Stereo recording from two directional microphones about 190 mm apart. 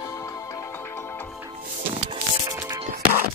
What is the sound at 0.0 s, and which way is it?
Music, 15° left (ahead or behind).